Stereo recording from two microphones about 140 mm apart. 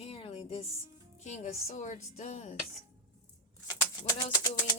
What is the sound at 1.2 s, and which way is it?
Speech, 55° left (ahead or behind).